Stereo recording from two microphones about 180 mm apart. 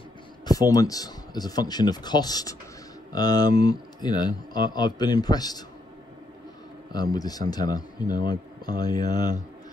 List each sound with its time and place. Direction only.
0.5 s speech: 20° left (ahead or behind)
6.9 s speech: 20° left (ahead or behind)